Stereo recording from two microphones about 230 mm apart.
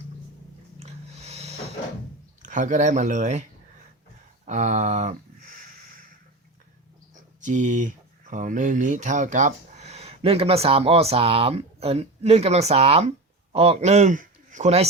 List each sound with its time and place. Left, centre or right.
0.8 s a sound: right
2.5 s speech: right
4.4 s speech: right
7.1 s speech: right